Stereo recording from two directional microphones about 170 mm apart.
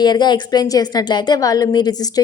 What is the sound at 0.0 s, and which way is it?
A woman's voice, 25° left (ahead or behind).